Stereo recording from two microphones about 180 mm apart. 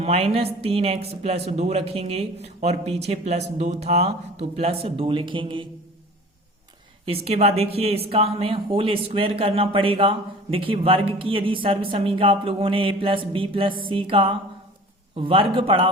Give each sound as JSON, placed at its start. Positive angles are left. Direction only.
{"t": 0.0, "sound": "speech", "side_deg": -35}
{"t": 7.0, "sound": "speech", "side_deg": -30}